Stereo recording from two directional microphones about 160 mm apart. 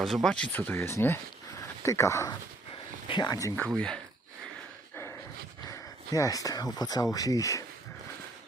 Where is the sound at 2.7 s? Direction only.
30° left (ahead or behind).